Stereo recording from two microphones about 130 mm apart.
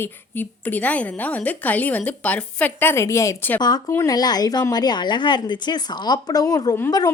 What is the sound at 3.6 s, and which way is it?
A woman's voice, 30° left (ahead or behind).